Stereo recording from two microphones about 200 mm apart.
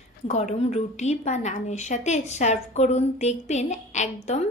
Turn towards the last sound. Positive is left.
turn(degrees=35)  # may be behind; listen again after turning